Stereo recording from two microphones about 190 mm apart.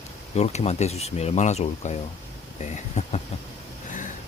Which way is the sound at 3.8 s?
40° left (ahead or behind).